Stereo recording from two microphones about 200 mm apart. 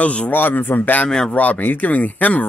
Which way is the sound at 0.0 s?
5° left (ahead or behind).